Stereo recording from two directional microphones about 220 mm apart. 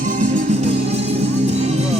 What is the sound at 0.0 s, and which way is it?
Music, 35° right (ahead or behind).